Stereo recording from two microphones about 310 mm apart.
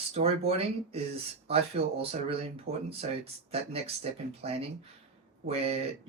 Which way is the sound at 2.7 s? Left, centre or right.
Right.